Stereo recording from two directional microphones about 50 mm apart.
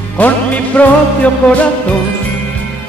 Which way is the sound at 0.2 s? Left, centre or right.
Left.